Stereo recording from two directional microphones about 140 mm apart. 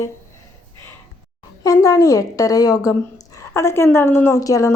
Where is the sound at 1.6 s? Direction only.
25° left (ahead or behind).